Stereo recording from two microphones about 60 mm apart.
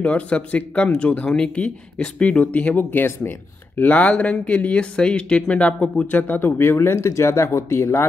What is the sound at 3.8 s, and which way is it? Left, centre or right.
Speech, left.